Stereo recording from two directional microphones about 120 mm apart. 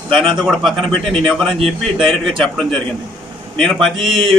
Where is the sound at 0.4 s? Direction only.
Centre (ahead or behind).